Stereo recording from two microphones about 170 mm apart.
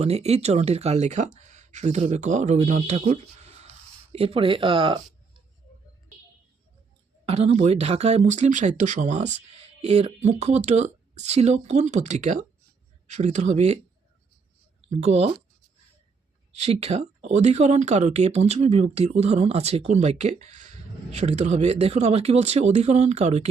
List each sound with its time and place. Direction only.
0.0 s speech: 40° right (ahead or behind)
7.3 s speech: 40° right (ahead or behind)
14.8 s speech: 40° right (ahead or behind)
16.6 s speech: 40° right (ahead or behind)